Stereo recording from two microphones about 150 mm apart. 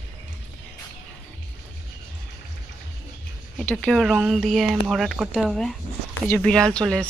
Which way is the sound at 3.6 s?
5° left (ahead or behind).